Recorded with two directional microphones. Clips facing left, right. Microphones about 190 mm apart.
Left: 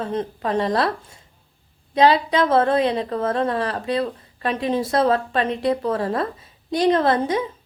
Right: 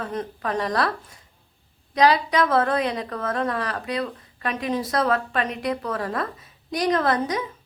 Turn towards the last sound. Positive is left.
turn(degrees=30)  # may be behind; listen again after turning